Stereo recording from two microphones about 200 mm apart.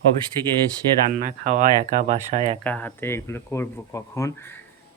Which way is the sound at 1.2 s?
40° right (ahead or behind).